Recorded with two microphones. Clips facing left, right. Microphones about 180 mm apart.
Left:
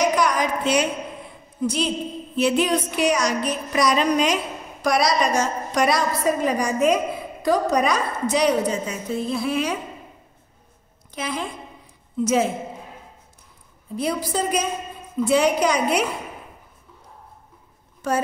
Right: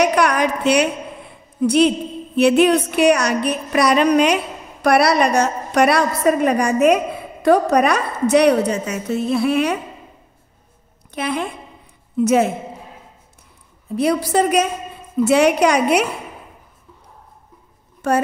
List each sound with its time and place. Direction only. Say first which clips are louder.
0.0 s a sound: right 4 dB; 70° right (ahead or behind)
1.6 s music: right 9 dB; 65° right (ahead or behind)
4.8 s a woman's voice: right 5 dB; 65° right (ahead or behind)
11.1 s music: right 5 dB; 65° right (ahead or behind)
13.9 s a woman's voice: right 7 dB; 75° right (ahead or behind)
18.0 s music: right 5 dB; 65° right (ahead or behind)